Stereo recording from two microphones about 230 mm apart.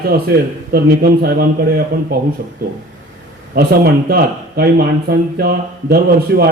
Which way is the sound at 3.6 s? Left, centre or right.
Right.